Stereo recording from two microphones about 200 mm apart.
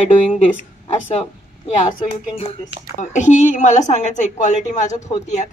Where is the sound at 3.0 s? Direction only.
35° left (ahead or behind).